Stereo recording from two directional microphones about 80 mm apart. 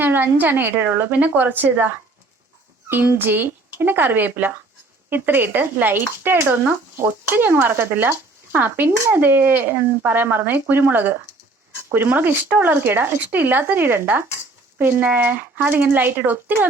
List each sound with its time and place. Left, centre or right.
0.0 s speech: right
2.9 s speech: right